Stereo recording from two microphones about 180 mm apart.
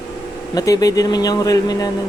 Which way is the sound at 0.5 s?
20° left (ahead or behind).